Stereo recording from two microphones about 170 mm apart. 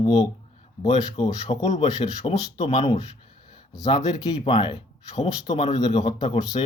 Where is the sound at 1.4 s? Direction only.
40° left (ahead or behind).